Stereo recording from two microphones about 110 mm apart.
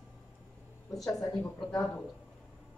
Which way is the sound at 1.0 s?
5° left (ahead or behind).